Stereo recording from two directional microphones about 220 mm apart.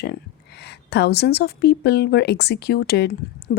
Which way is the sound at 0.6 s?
50° left (ahead or behind).